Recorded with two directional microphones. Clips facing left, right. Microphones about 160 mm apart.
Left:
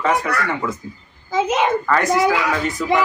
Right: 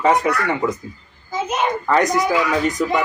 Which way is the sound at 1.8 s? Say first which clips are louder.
Right 2 dB; 20° right (ahead or behind).